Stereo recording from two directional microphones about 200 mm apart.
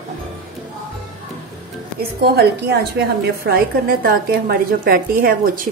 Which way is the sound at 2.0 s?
50° right (ahead or behind).